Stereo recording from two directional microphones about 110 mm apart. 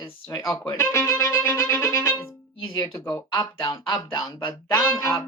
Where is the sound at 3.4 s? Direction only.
45° left (ahead or behind).